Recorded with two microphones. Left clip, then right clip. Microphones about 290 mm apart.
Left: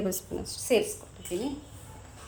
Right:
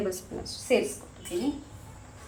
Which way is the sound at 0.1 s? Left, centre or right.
Left.